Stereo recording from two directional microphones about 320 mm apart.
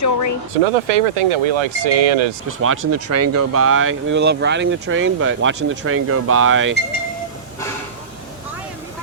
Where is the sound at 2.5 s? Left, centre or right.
Right.